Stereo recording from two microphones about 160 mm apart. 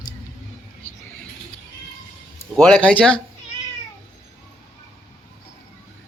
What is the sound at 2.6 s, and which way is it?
Speech, 5° left (ahead or behind).